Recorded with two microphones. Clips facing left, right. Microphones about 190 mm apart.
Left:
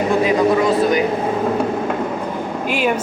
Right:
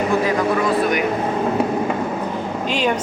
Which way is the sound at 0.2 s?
20° left (ahead or behind).